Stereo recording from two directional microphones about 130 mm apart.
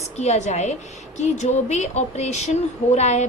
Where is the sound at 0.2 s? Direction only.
60° left (ahead or behind).